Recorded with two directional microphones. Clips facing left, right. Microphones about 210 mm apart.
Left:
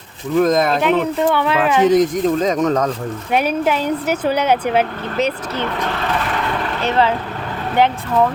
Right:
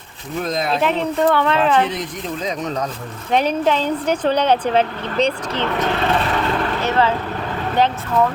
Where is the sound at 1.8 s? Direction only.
45° left (ahead or behind).